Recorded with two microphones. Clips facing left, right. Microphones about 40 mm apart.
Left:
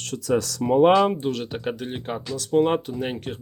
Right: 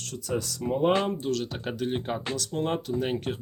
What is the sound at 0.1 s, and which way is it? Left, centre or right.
Speech, left.